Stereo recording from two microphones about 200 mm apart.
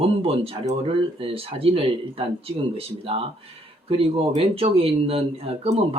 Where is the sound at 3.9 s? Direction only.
25° right (ahead or behind).